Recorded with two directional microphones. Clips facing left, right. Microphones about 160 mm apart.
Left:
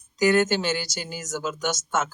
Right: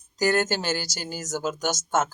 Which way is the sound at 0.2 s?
40° right (ahead or behind).